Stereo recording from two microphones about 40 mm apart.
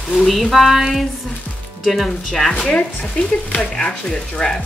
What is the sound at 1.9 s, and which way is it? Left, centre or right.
Speech, centre.